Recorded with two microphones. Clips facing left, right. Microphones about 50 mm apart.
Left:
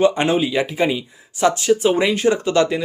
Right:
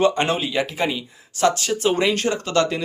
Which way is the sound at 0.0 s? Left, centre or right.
Centre.